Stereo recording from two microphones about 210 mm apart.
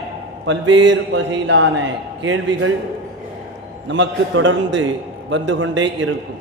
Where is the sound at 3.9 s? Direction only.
65° right (ahead or behind).